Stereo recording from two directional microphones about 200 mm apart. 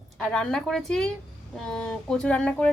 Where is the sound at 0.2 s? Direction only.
5° left (ahead or behind).